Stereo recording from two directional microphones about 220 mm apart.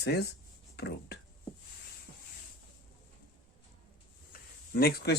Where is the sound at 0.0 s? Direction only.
50° left (ahead or behind).